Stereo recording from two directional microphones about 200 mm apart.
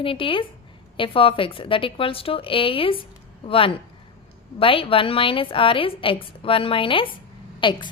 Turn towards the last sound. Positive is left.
turn(degrees=25)  # may be behind; listen again after turning